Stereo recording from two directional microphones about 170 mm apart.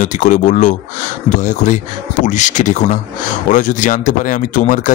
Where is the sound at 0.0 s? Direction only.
45° left (ahead or behind).